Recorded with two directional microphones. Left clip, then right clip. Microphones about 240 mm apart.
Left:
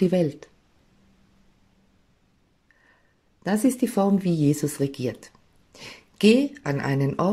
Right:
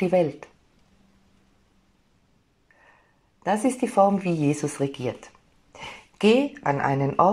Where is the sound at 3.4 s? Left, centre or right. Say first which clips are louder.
Even; left.